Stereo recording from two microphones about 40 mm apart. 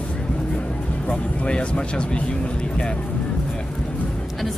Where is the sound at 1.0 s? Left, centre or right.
Left.